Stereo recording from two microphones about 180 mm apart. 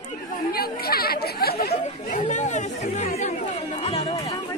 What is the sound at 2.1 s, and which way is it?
Chatter, 40° left (ahead or behind).